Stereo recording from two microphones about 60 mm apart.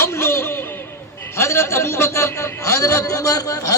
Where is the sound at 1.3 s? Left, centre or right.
Left.